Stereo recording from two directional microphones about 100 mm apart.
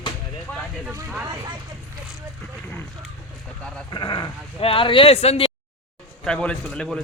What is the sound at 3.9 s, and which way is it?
Speech, 45° left (ahead or behind).